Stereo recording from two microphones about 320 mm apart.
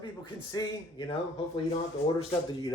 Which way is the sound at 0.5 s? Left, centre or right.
Centre.